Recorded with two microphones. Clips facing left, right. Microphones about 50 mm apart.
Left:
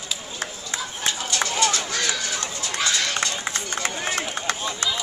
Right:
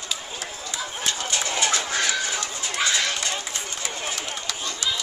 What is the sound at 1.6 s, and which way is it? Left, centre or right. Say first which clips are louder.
Bird: right 1 dB; right.